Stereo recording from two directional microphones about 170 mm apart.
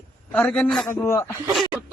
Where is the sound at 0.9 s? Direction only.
15° left (ahead or behind).